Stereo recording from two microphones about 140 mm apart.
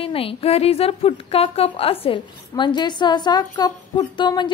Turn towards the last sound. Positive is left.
turn(degrees=35)  # may be behind; listen again after turning